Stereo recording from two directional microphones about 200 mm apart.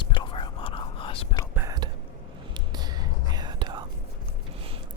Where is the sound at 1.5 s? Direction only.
15° right (ahead or behind).